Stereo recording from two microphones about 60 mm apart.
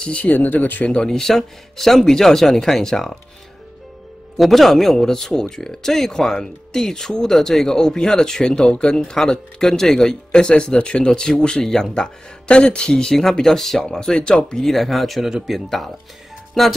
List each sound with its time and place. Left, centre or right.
0.2 s speech: left
0.8 s speech: centre
4.4 s speech: centre